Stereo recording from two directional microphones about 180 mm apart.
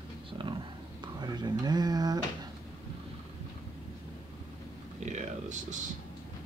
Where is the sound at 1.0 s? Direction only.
25° right (ahead or behind).